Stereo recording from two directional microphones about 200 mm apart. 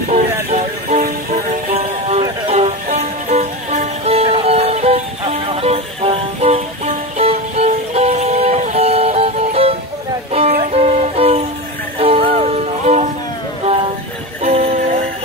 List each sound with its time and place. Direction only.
0.1 s music: 35° right (ahead or behind)
1.8 s music: 35° right (ahead or behind)
14.4 s music: 30° right (ahead or behind)